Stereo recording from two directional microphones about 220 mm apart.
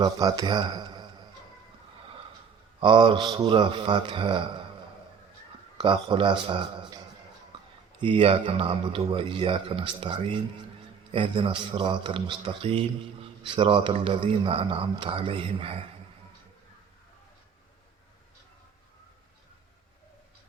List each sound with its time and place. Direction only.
0.0 s speech: 15° right (ahead or behind)
2.8 s speech: 20° right (ahead or behind)
5.7 s speech: 20° right (ahead or behind)
8.0 s speech: 25° right (ahead or behind)